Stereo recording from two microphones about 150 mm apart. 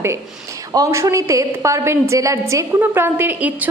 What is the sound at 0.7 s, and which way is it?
A woman's voice, 20° right (ahead or behind).